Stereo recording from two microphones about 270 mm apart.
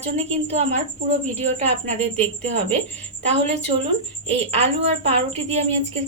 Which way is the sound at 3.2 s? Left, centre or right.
Right.